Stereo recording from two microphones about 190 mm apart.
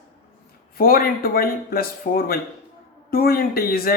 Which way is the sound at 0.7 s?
50° left (ahead or behind).